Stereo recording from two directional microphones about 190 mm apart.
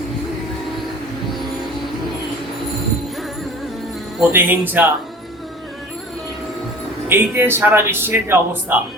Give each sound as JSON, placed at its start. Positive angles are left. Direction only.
{"t": 4.3, "sound": "speech", "side_deg": -10}
{"t": 7.1, "sound": "speech", "side_deg": -10}